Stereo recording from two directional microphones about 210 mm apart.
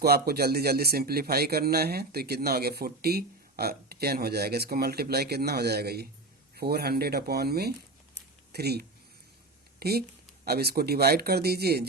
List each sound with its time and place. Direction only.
0.0 s a man's voice: 50° right (ahead or behind)
8.1 s a sound: 50° right (ahead or behind)
9.8 s a man's voice: 45° right (ahead or behind)